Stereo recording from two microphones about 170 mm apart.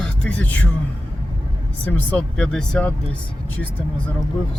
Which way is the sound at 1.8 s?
10° left (ahead or behind).